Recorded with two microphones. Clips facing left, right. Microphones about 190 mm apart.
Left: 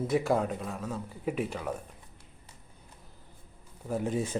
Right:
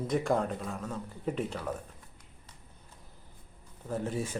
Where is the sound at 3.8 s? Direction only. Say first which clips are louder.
Left 3 dB; 15° left (ahead or behind).